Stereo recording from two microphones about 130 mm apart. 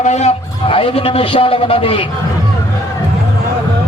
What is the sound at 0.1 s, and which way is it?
A man's voice, 55° left (ahead or behind).